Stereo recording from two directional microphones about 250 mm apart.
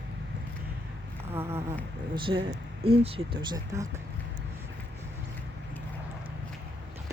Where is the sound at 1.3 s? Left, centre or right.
Centre.